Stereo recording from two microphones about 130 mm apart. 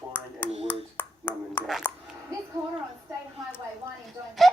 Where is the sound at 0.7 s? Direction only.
15° left (ahead or behind).